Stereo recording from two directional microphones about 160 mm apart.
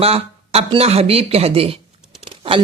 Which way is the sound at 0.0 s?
40° right (ahead or behind).